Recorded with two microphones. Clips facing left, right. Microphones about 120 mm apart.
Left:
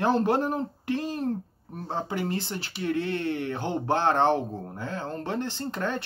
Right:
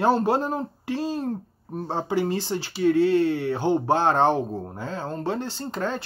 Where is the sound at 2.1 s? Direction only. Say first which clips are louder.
Right 9 dB; 15° right (ahead or behind).